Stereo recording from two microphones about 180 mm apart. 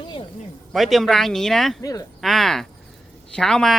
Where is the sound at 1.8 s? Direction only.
20° left (ahead or behind).